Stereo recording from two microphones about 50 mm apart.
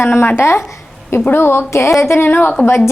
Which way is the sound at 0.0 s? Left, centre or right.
Left.